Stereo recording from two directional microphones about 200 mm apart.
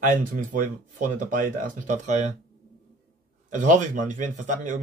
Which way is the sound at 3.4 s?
40° right (ahead or behind).